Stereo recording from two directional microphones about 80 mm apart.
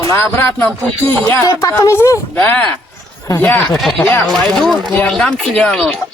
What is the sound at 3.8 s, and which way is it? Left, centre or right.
Speech, centre.